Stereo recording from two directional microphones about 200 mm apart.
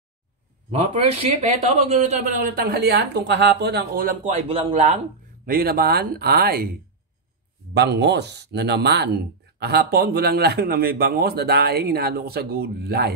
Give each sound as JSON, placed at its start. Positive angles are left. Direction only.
{"t": 0.7, "sound": "speech", "side_deg": -30}
{"t": 5.4, "sound": "speech", "side_deg": -50}